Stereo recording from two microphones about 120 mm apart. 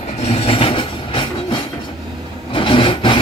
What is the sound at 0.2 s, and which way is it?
Train, 55° left (ahead or behind).